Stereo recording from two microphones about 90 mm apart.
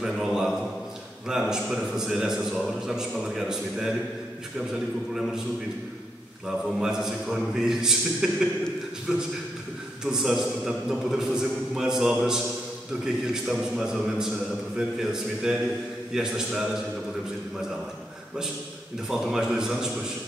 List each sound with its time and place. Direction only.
0.0 s a man's voice: 5° right (ahead or behind)
6.8 s a man's voice: 5° right (ahead or behind)
19.0 s a man's voice: 5° right (ahead or behind)